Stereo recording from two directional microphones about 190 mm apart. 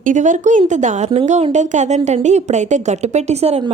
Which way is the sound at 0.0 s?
40° right (ahead or behind).